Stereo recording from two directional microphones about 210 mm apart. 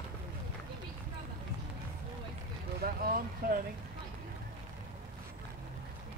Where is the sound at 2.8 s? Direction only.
45° right (ahead or behind).